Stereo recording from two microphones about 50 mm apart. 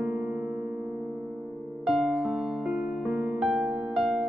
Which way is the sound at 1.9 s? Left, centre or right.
Centre.